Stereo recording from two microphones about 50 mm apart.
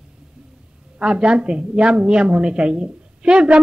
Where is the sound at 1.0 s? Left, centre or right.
Centre.